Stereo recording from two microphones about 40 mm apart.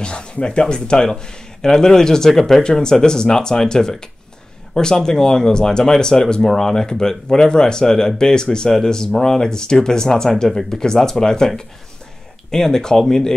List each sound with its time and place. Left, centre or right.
0.0 s speech: left; by 2.6 s centre
2.6 s speech: centre